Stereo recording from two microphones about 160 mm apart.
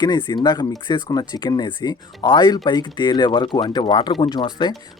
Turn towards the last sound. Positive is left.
turn(degrees=30)  # may be behind; listen again after turning